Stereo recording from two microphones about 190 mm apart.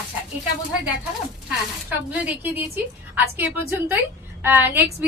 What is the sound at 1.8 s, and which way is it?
A woman's voice, 5° right (ahead or behind).